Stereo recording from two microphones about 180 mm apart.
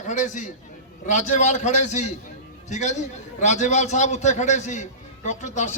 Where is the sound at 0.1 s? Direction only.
45° left (ahead or behind).